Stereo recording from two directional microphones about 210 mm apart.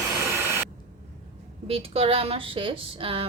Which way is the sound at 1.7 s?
25° right (ahead or behind).